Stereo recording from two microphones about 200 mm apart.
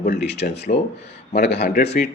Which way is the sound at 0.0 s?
55° left (ahead or behind).